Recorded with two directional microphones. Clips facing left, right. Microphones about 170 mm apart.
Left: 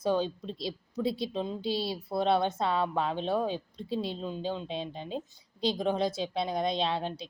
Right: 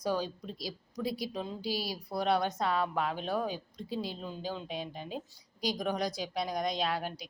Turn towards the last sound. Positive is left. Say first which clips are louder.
# left 3 dB
turn(degrees=25)  # may be behind; listen again after turning